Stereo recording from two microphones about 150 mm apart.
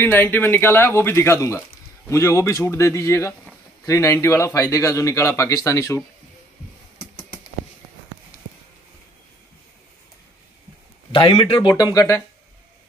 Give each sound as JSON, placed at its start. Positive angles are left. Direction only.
{"t": 0.0, "sound": "speech", "side_deg": 15}
{"t": 11.1, "sound": "speech", "side_deg": 35}